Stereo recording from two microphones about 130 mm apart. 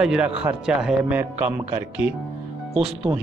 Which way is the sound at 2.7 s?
5° right (ahead or behind).